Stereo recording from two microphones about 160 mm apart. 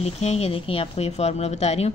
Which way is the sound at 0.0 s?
40° left (ahead or behind).